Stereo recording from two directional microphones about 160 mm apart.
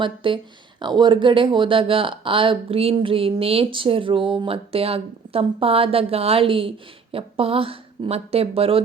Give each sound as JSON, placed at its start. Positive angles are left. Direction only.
{"t": 0.0, "sound": "speech", "side_deg": -30}